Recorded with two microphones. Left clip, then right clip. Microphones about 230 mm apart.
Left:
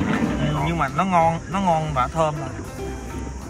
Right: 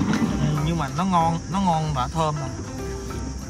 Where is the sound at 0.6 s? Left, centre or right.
Centre.